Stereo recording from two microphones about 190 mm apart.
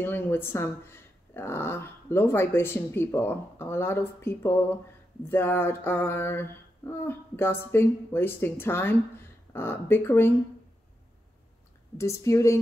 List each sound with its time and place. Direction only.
0.0 s speech: 10° left (ahead or behind)
12.0 s speech: 15° left (ahead or behind)